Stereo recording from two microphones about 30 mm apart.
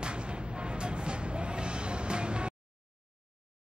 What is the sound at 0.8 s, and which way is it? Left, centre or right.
Music, right.